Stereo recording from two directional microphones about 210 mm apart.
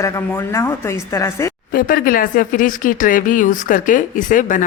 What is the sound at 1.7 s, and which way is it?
Speech, 40° left (ahead or behind).